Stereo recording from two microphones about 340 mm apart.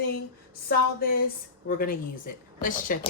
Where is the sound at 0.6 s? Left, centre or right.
Left.